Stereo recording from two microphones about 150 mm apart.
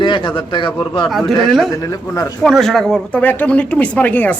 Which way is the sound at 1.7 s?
20° left (ahead or behind).